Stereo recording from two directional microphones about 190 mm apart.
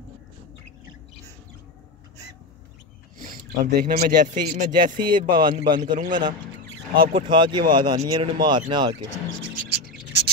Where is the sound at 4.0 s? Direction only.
50° right (ahead or behind).